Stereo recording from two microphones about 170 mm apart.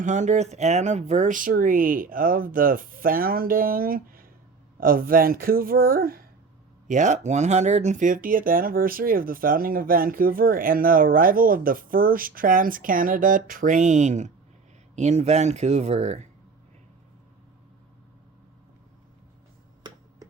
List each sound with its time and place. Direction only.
0.0 s speech: 45° right (ahead or behind)
6.8 s speech: 45° right (ahead or behind)